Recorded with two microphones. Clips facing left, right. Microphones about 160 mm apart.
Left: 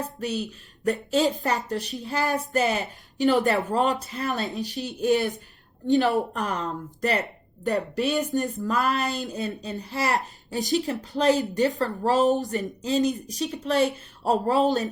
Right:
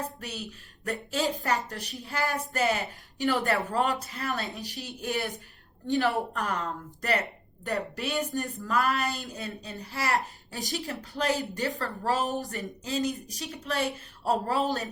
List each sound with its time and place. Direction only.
1.1 s a woman's voice: 20° left (ahead or behind)